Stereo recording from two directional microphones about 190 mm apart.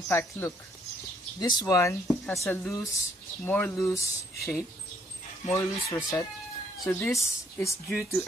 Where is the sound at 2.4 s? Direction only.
15° left (ahead or behind).